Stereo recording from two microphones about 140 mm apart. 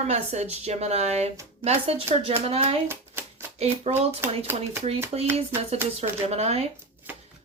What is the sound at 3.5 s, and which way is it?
Speech, 50° right (ahead or behind).